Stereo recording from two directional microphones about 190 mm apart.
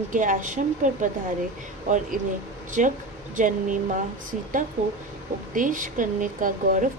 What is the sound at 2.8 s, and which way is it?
Speech, 45° right (ahead or behind).